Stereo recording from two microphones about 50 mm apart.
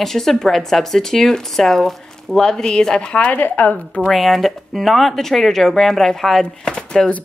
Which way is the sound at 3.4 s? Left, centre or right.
Left.